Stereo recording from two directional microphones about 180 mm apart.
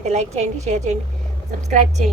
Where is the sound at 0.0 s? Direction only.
40° right (ahead or behind).